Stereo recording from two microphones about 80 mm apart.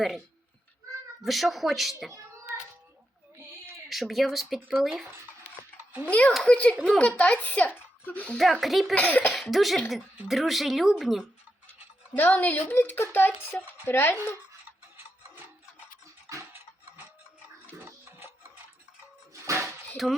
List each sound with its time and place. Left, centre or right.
1.2 s speech: centre
3.8 s speech: centre
6.1 s speech: centre
8.6 s speech: centre
9.0 s speech: left
9.3 s speech: centre
12.1 s speech: left
16.3 s a sound: right
17.8 s music: right
19.3 s a sound: right
20.0 s speech: centre